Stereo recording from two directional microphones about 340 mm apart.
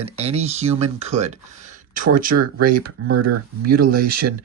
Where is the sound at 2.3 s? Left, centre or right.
Right.